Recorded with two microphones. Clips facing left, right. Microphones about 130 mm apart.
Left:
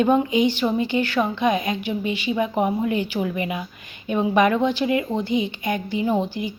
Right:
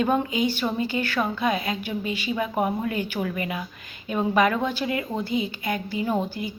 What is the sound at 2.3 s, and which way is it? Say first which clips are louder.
A woman's voice: left 3 dB; 20° left (ahead or behind).